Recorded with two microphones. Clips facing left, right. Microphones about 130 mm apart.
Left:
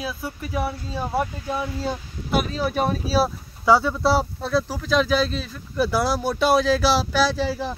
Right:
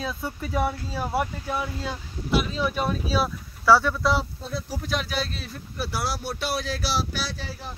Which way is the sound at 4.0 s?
35° left (ahead or behind).